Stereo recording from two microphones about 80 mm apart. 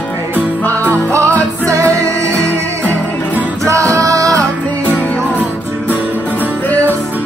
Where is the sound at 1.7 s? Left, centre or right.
Right.